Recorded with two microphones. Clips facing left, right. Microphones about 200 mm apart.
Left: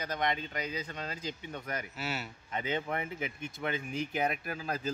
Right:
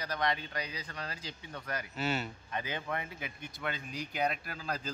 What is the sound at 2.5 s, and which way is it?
Speech, 20° left (ahead or behind).